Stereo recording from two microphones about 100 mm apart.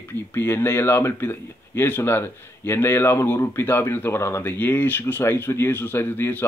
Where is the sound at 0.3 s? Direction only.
25° left (ahead or behind).